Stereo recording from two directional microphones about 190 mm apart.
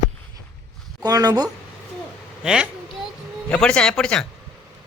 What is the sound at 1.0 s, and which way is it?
Speech, 20° right (ahead or behind).